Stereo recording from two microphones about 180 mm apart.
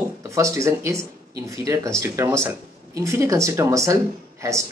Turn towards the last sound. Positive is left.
turn(degrees=-15)  # may be behind; listen again after turning